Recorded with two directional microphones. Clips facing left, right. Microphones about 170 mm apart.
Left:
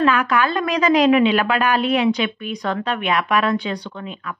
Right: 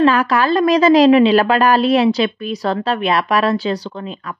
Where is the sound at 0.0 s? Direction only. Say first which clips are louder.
Right 4 dB; 35° right (ahead or behind).